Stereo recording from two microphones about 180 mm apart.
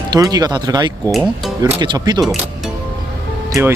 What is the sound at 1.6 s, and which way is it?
Speech, 25° right (ahead or behind).